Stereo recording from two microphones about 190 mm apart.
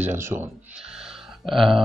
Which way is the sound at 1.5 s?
Centre (ahead or behind).